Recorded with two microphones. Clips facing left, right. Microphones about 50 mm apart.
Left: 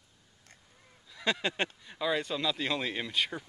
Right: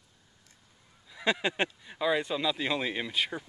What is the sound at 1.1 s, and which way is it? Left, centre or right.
Speech, centre.